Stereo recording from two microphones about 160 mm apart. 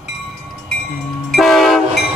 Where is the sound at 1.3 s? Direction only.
Centre (ahead or behind).